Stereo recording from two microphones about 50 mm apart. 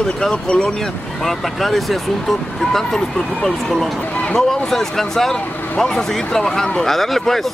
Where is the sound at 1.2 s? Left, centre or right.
Centre.